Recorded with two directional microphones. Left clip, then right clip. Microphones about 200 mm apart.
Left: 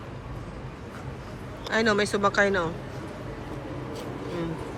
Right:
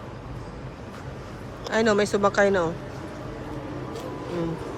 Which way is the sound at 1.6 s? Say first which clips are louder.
Right 2 dB; 10° right (ahead or behind).